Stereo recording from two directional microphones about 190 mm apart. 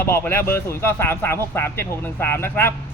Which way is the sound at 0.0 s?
10° left (ahead or behind).